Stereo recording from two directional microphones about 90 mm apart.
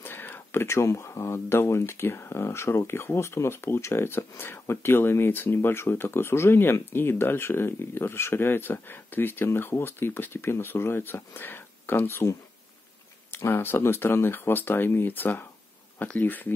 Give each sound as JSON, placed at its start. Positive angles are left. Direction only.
{"t": 0.0, "sound": "speech", "side_deg": 25}